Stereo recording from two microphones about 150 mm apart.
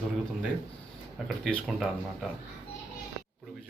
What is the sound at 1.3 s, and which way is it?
Speech, centre (ahead or behind).